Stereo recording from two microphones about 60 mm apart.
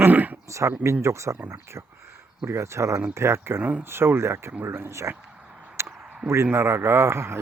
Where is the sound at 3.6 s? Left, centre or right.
Right.